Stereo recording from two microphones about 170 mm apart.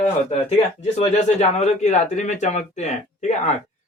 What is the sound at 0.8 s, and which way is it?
Speech, 40° left (ahead or behind).